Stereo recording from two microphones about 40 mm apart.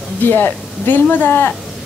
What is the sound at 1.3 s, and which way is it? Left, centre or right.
Speech, left.